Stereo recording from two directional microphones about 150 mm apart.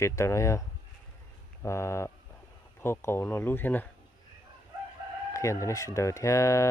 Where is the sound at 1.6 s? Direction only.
20° left (ahead or behind).